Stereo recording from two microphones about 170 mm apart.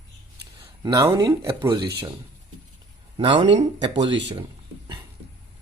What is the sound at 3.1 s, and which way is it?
Speech, 30° right (ahead or behind).